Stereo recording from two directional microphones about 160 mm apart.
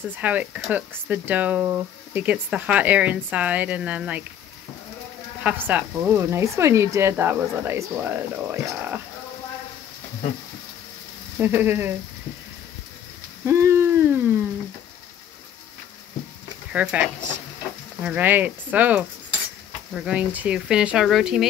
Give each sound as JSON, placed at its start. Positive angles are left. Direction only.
{"t": 0.1, "sound": "speech", "side_deg": -10}
{"t": 5.4, "sound": "speech", "side_deg": -10}
{"t": 11.3, "sound": "speech", "side_deg": -15}
{"t": 13.5, "sound": "a sound", "side_deg": -15}
{"t": 16.7, "sound": "speech", "side_deg": -10}